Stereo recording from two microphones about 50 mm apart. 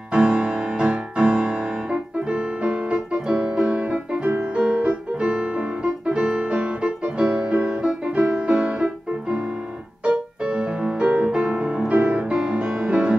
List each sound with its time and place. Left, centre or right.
0.1 s music: right